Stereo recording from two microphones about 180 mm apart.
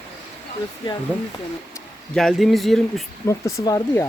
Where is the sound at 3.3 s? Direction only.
15° left (ahead or behind).